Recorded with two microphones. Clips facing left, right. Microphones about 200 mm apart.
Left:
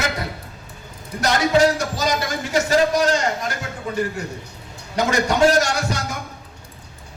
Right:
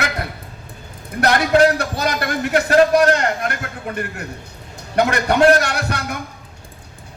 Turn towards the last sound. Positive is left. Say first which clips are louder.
# right 1 dB
turn(degrees=-60)  # may be behind; listen again after turning